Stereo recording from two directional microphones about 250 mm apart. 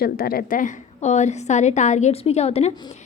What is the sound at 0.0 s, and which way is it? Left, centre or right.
A woman's voice, left.